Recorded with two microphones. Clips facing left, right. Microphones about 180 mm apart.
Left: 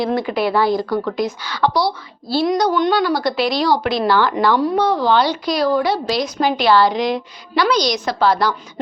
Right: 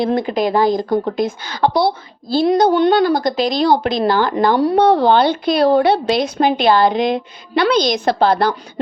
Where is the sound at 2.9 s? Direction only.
50° right (ahead or behind).